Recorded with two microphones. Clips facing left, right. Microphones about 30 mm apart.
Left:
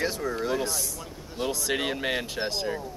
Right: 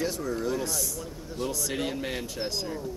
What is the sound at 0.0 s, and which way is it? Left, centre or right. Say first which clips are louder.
Speech: left 1 dB; left.